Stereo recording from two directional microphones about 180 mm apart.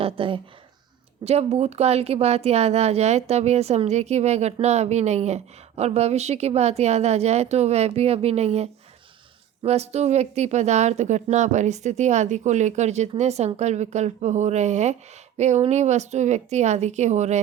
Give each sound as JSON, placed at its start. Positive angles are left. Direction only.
{"t": 0.0, "sound": "a woman's voice", "side_deg": -30}